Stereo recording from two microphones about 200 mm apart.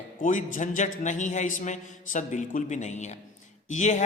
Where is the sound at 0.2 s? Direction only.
40° left (ahead or behind).